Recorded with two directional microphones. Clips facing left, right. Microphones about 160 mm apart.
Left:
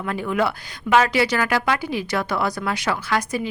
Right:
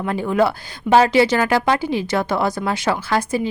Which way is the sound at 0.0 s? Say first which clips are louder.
Right 4 dB; 30° right (ahead or behind).